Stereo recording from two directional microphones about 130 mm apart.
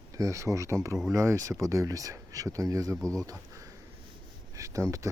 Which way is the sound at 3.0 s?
5° left (ahead or behind).